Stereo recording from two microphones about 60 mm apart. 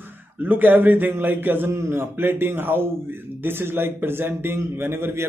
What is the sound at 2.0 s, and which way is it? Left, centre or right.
A man's voice, right.